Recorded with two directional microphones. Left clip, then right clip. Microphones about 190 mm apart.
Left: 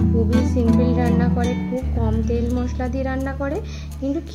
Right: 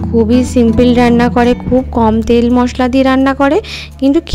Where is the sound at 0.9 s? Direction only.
55° right (ahead or behind).